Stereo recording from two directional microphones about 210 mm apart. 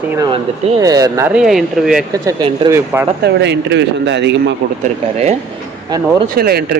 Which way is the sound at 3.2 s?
55° right (ahead or behind).